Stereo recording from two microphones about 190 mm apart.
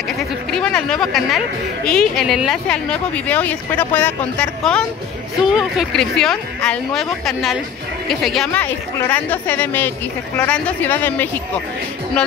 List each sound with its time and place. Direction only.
0.5 s a woman's voice: 5° left (ahead or behind)